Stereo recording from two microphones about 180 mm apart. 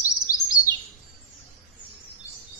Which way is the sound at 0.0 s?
20° left (ahead or behind).